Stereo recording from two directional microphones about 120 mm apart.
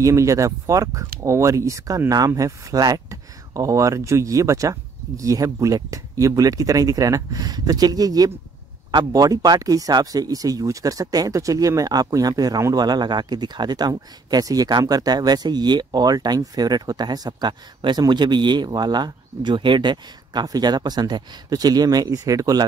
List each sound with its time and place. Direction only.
0.0 s speech: 25° right (ahead or behind)